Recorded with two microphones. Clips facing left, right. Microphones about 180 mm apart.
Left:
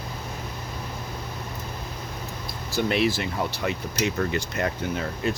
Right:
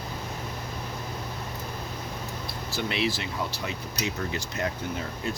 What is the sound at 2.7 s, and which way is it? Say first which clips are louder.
Speech: left 6 dB; 50° left (ahead or behind).